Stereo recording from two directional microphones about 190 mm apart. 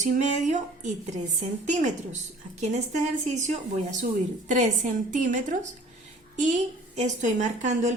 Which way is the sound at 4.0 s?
40° right (ahead or behind).